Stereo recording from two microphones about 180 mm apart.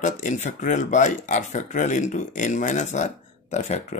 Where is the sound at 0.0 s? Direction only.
40° left (ahead or behind).